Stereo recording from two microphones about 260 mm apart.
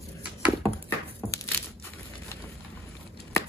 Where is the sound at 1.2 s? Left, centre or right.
Centre.